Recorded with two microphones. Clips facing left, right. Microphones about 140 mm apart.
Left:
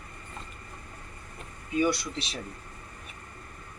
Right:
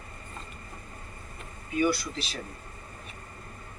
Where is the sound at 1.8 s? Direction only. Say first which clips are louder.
Right 1 dB; 25° left (ahead or behind).